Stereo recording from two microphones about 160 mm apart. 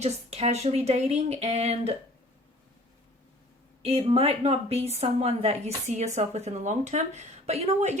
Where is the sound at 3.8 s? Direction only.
40° right (ahead or behind).